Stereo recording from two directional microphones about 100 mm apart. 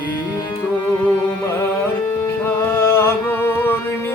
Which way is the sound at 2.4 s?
25° left (ahead or behind).